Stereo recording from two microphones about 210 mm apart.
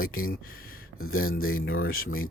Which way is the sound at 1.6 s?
70° left (ahead or behind).